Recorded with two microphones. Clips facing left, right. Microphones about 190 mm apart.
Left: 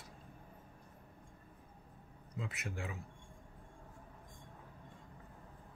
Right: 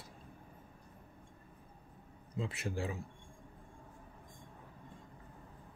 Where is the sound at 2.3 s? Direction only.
30° right (ahead or behind).